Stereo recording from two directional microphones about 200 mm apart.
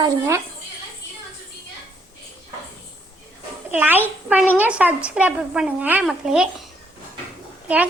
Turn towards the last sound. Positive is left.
turn(degrees=-5)  # may be behind; listen again after turning